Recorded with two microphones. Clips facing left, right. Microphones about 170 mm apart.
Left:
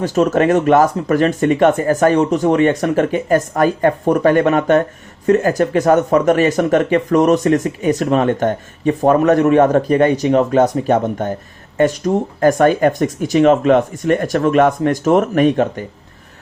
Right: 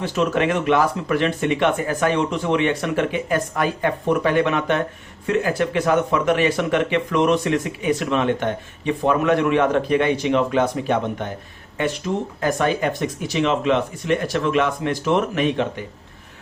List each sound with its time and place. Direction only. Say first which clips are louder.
0.0 s speech: left 6 dB; 45° left (ahead or behind)